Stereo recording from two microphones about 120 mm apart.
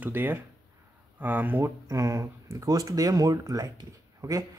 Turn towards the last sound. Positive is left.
turn(degrees=-25)  # may be behind; listen again after turning